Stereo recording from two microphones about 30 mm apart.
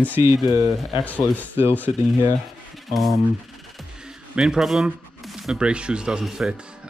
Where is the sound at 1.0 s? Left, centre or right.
Left.